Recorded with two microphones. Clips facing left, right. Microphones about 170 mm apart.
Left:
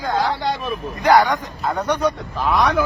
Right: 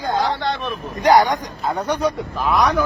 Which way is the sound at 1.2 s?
15° right (ahead or behind).